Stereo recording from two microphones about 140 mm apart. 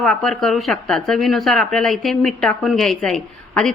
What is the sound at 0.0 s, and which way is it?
Speech, 5° left (ahead or behind).